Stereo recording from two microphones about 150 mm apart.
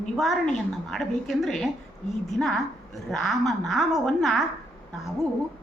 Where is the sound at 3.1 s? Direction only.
Centre (ahead or behind).